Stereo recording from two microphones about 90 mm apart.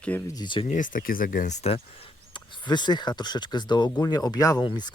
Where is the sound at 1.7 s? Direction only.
90° left.